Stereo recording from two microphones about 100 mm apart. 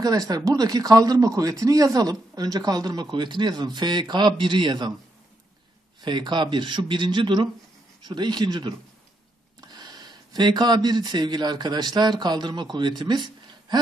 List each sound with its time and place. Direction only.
0.0 s speech: 40° right (ahead or behind)
5.9 s speech: 50° right (ahead or behind)